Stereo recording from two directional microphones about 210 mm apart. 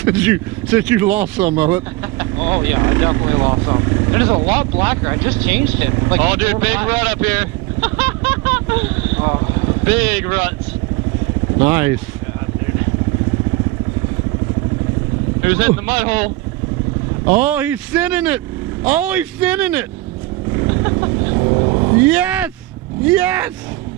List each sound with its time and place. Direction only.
0.0 s speech: 10° right (ahead or behind)
9.8 s speech: 10° right (ahead or behind)
11.6 s speech: 10° right (ahead or behind)
15.4 s speech: 10° right (ahead or behind)
17.3 s speech: 10° right (ahead or behind)
20.7 s vehicle: 15° right (ahead or behind)
21.9 s speech: 5° right (ahead or behind)